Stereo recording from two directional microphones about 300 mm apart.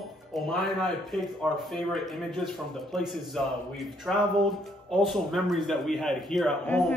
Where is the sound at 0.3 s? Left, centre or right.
Centre.